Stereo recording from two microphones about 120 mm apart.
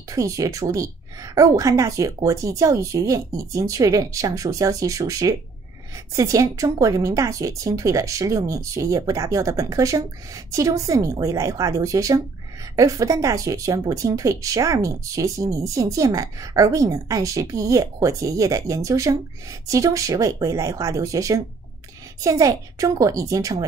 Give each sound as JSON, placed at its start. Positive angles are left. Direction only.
{"t": 0.1, "sound": "speech", "side_deg": -25}